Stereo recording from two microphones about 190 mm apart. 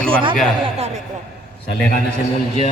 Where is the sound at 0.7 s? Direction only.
35° right (ahead or behind).